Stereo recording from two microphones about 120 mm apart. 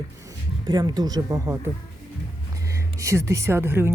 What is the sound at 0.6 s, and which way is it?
Speech, 35° right (ahead or behind).